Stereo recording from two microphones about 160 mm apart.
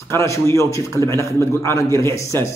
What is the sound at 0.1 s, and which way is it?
A man's voice, 20° left (ahead or behind).